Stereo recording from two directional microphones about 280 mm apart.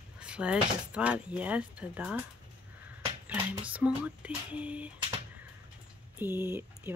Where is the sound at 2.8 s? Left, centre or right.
Centre.